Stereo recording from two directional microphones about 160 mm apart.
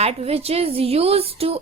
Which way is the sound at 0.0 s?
40° right (ahead or behind).